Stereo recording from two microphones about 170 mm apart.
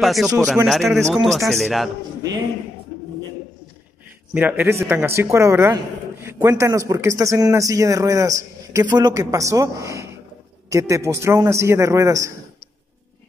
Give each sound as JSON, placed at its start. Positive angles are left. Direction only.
{"t": 0.0, "sound": "a man's voice", "side_deg": 0}
{"t": 4.3, "sound": "a man's voice", "side_deg": -10}